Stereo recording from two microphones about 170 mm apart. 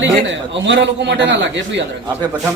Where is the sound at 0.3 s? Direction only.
90° right.